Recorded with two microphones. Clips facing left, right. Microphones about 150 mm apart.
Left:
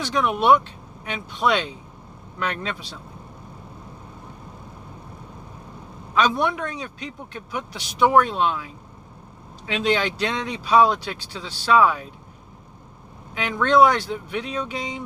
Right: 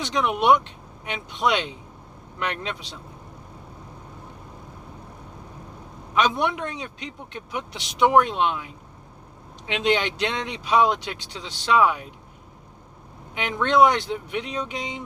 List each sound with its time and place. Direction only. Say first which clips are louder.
0.0 s speech: left 1 dB; 20° right (ahead or behind)
6.1 s speech: left 1 dB; 20° right (ahead or behind)
13.3 s speech: left 2 dB; 20° right (ahead or behind)